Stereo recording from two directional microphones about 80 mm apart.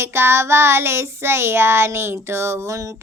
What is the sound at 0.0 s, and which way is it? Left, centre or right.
Child singing, right.